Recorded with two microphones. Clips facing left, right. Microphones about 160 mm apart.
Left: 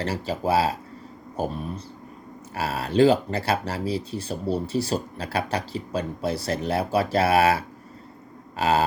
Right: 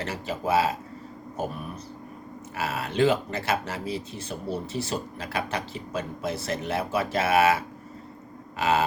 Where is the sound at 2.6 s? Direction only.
35° left (ahead or behind).